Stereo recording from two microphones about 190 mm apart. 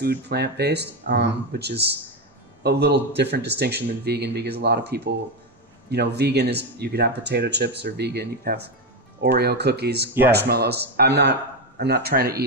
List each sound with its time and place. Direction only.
0.0 s speech: 60° right (ahead or behind)